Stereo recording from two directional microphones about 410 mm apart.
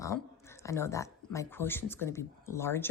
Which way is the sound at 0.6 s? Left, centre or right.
Centre.